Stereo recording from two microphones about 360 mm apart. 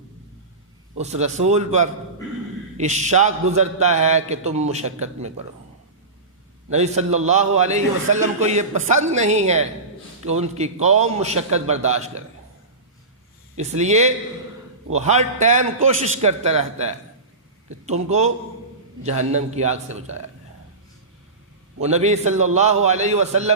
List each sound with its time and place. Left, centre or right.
0.9 s a man's voice: centre
6.7 s a man's voice: centre
13.6 s a man's voice: centre
21.8 s a man's voice: centre